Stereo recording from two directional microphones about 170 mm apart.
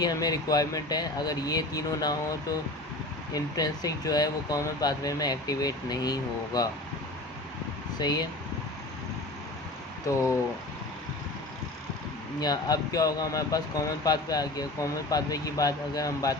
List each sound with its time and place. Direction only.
0.0 s speech: 20° left (ahead or behind)
7.9 s speech: 25° left (ahead or behind)
12.4 s speech: 20° left (ahead or behind)